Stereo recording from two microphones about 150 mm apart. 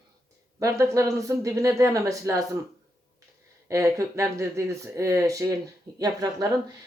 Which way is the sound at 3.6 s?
20° right (ahead or behind).